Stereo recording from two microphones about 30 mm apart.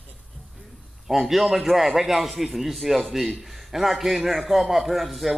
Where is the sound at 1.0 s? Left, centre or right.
Centre.